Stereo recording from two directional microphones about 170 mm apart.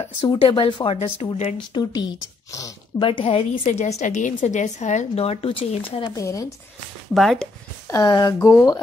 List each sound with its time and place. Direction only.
0.0 s a woman's voice: 30° left (ahead or behind)
7.2 s speech: 5° left (ahead or behind)
7.9 s speech: 25° left (ahead or behind)